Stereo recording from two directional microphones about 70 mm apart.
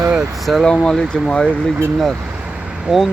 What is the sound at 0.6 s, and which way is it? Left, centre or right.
Speech, centre.